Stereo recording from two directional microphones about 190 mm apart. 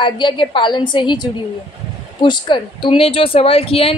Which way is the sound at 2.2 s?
25° left (ahead or behind).